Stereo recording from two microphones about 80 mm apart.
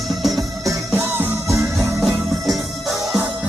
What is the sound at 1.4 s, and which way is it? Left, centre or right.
Music, right.